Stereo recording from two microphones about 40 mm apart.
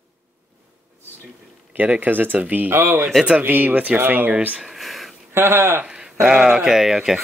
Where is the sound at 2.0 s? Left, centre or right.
Right.